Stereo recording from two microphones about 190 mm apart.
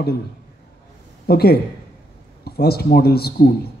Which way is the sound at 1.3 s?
55° left (ahead or behind).